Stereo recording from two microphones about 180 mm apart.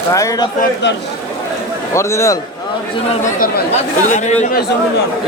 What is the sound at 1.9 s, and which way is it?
Speech, 15° left (ahead or behind).